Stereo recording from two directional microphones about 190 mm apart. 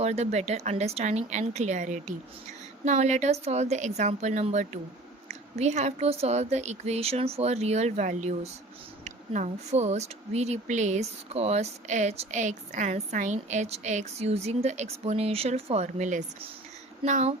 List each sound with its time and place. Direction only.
0.0 s speech: 35° right (ahead or behind)